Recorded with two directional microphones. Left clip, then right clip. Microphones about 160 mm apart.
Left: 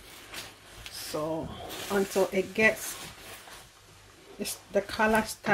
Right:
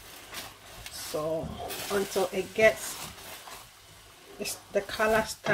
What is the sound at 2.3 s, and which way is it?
Speech, 35° left (ahead or behind).